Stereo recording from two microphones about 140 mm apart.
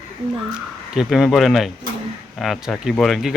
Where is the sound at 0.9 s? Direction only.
5° right (ahead or behind).